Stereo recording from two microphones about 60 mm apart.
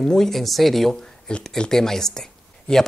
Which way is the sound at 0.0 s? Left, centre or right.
Centre.